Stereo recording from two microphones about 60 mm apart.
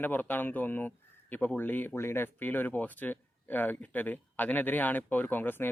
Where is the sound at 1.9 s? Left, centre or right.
Left.